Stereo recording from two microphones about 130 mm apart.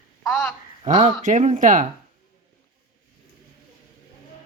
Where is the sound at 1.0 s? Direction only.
65° right (ahead or behind).